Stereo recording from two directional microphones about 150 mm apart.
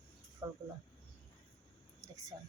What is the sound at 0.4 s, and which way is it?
Speech, 20° right (ahead or behind).